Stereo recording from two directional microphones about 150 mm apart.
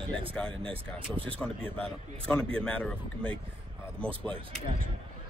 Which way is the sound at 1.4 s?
5° left (ahead or behind).